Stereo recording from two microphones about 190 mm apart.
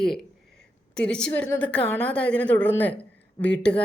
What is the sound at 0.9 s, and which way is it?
A woman's voice, 5° left (ahead or behind).